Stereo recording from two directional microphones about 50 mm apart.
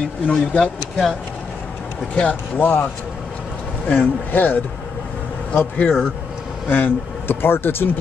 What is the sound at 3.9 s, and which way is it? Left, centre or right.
Speech, left.